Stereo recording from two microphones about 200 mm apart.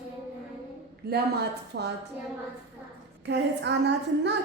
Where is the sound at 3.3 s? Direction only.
60° right (ahead or behind).